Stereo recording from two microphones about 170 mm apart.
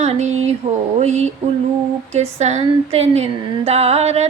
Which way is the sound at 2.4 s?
40° right (ahead or behind).